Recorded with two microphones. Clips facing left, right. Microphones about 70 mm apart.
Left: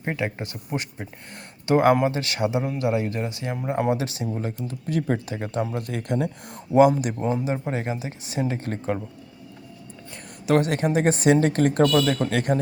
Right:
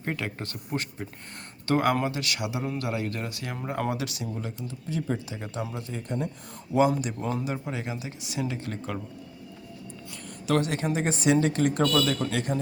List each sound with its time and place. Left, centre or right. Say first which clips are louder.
0.0 s speech: left 4 dB; left
4.9 s a woman's voice: left 6 dB; left
5.9 s speech: left 6 dB; left
6.7 s a woman's voice: left 6 dB; left
7.2 s speech: left 5 dB; left
10.4 s a woman's voice: left 5 dB; left